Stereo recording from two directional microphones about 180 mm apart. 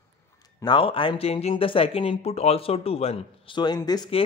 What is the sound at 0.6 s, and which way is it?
Speech, 25° left (ahead or behind).